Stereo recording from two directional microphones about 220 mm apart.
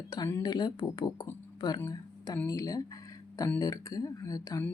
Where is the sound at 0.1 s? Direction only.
15° left (ahead or behind).